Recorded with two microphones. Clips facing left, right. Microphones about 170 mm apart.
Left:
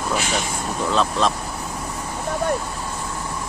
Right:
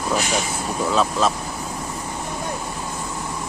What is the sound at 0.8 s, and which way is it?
Speech, 5° right (ahead or behind).